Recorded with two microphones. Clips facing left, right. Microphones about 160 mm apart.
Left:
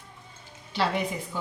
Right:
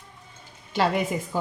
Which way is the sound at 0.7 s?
45° right (ahead or behind).